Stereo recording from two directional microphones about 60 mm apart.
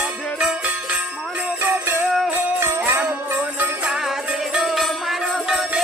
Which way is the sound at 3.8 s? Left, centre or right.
Centre.